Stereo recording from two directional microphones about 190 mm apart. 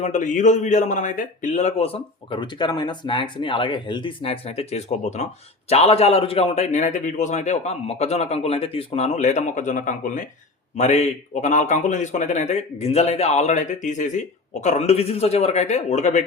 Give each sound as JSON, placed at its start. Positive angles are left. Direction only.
{"t": 0.0, "sound": "a man's voice", "side_deg": 40}